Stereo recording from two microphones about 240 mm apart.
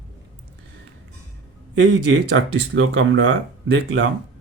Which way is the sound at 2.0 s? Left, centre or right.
Right.